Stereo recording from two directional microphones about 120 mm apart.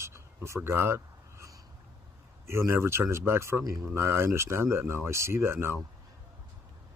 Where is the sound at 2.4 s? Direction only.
20° right (ahead or behind).